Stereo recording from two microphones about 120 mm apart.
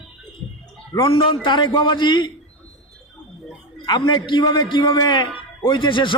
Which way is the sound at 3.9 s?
40° left (ahead or behind).